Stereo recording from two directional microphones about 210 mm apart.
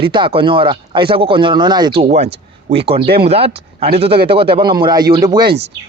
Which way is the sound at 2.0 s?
30° right (ahead or behind).